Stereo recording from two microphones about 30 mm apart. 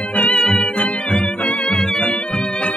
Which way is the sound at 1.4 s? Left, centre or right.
Left.